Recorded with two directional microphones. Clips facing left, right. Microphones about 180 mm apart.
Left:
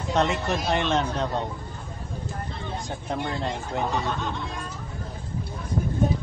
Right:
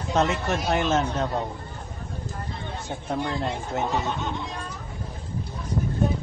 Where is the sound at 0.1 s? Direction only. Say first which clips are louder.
Even; centre (ahead or behind).